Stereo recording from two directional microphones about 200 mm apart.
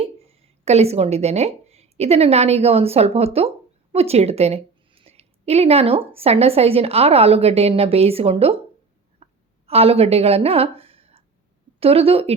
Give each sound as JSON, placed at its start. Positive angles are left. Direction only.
{"t": 0.0, "sound": "a woman's voice", "side_deg": -30}
{"t": 9.2, "sound": "a sound", "side_deg": -30}
{"t": 11.8, "sound": "a woman's voice", "side_deg": -30}